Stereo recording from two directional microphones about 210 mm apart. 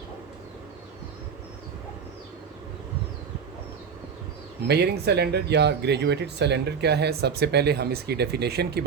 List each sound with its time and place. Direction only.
4.7 s speech: 50° right (ahead or behind)